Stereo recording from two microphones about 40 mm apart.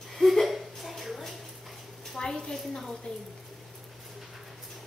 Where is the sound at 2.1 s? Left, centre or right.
Centre.